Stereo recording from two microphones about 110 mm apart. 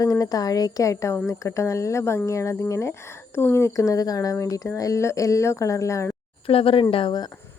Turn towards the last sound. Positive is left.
turn(degrees=40)  # may be behind; listen again after turning